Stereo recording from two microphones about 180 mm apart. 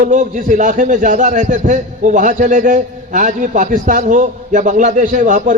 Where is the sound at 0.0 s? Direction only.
45° right (ahead or behind).